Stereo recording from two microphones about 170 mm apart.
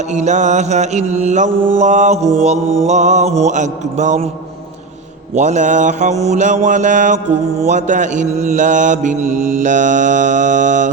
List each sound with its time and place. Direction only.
0.1 s mantra: 45° right (ahead or behind)
5.3 s mantra: 45° right (ahead or behind)